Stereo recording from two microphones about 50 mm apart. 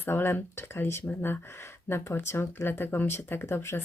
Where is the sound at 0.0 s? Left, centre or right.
Left.